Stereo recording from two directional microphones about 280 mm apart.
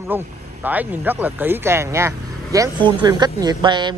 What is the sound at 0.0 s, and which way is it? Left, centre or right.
Speech, centre.